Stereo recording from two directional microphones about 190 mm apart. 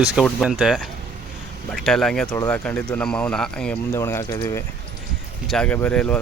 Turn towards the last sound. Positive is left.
turn(degrees=5)  # may be behind; listen again after turning